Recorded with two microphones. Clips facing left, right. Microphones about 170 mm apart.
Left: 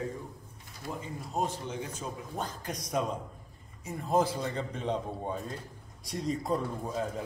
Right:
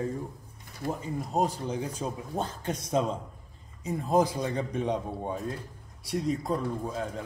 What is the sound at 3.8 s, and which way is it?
A man's voice, 15° right (ahead or behind).